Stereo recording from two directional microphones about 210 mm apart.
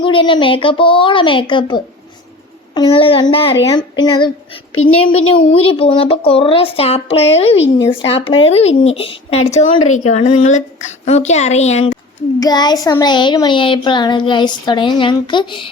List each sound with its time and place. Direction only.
0.0 s a child's voice: 25° left (ahead or behind)
12.4 s a child's voice: 20° left (ahead or behind)